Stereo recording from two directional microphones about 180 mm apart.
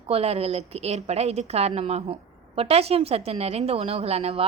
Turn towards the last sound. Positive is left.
turn(degrees=-35)  # may be behind; listen again after turning